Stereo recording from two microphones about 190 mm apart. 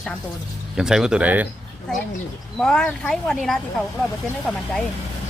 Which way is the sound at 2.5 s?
5° left (ahead or behind).